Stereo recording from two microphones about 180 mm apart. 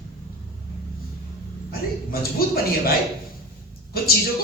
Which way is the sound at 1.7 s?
55° left (ahead or behind).